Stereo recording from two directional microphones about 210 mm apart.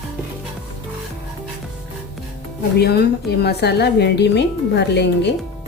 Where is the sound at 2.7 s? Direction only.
50° left (ahead or behind).